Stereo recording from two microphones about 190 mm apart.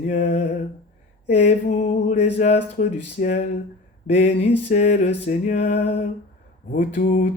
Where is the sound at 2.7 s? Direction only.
45° left (ahead or behind).